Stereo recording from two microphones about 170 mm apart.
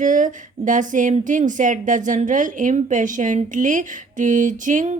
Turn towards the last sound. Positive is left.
turn(degrees=-50)  # may be behind; listen again after turning